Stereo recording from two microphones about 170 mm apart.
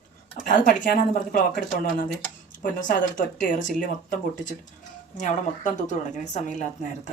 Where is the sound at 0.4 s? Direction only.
55° left (ahead or behind).